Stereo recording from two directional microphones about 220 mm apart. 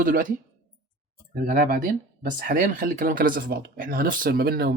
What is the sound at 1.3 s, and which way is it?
Speech, 40° right (ahead or behind).